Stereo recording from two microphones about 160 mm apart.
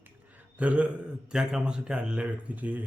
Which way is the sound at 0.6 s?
10° right (ahead or behind).